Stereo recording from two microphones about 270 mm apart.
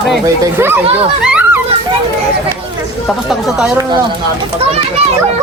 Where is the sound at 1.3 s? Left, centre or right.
Centre.